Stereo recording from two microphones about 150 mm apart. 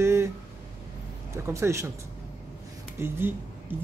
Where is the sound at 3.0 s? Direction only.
15° right (ahead or behind).